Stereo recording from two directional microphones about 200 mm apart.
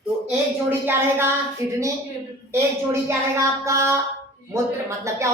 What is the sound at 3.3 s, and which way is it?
Speech, 15° right (ahead or behind).